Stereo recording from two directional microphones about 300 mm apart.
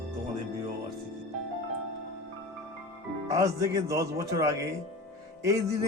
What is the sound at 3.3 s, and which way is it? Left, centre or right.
Speech, centre.